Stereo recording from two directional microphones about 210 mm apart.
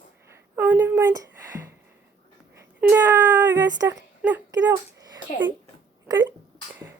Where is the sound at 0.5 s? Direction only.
10° right (ahead or behind).